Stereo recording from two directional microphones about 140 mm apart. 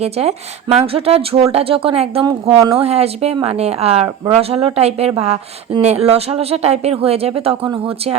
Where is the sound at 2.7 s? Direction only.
45° right (ahead or behind).